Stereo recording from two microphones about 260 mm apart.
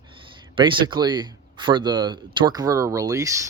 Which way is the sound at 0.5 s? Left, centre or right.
Centre.